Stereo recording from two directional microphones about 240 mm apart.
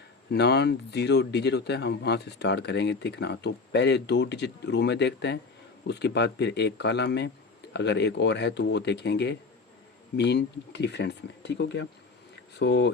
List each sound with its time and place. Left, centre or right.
0.3 s speech: left